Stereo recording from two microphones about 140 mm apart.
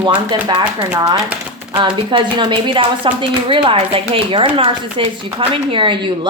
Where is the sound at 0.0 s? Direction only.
35° right (ahead or behind).